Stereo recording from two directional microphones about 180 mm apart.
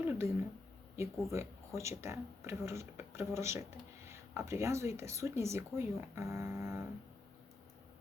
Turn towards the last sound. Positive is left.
turn(degrees=-15)  # may be behind; listen again after turning